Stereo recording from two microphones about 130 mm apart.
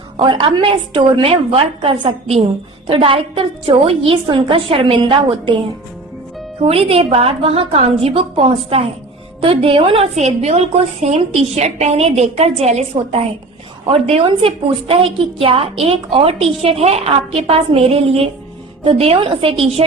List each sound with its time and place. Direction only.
0.2 s a woman's voice: 40° right (ahead or behind)
6.6 s a woman's voice: 50° right (ahead or behind)
13.8 s a woman's voice: 45° right (ahead or behind)